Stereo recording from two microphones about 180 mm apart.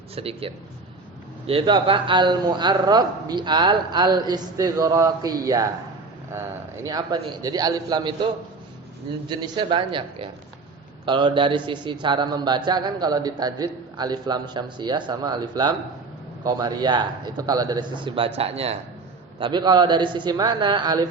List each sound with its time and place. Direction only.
0.2 s a man's voice: 30° right (ahead or behind)
6.8 s a man's voice: 20° right (ahead or behind)
9.3 s a man's voice: 25° right (ahead or behind)